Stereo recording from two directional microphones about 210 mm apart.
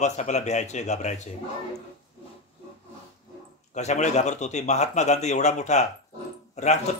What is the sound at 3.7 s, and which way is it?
Speech, 35° left (ahead or behind).